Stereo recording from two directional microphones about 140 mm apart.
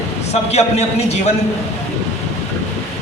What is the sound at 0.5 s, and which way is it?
Speech, 50° left (ahead or behind).